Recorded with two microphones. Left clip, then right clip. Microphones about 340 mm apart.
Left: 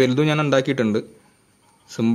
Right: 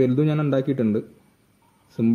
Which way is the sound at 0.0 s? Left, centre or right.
Left.